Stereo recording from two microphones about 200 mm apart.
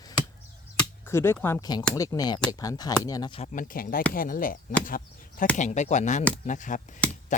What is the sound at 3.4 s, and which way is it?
Speech, 40° left (ahead or behind).